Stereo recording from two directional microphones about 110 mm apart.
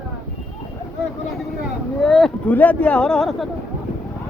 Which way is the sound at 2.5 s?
15° left (ahead or behind).